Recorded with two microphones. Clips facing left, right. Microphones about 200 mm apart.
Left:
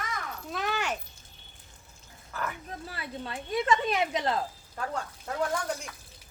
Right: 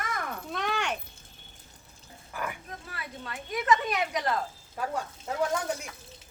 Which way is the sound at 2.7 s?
30° left (ahead or behind).